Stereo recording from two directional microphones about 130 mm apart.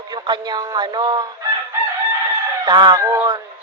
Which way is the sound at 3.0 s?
25° right (ahead or behind).